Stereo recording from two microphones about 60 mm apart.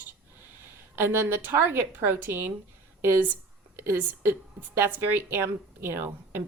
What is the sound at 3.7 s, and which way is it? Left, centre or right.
A woman's voice, right.